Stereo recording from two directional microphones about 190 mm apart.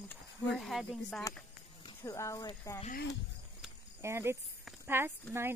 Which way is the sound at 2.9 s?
60° left (ahead or behind).